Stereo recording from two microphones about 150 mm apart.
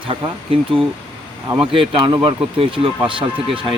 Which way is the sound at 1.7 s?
35° right (ahead or behind).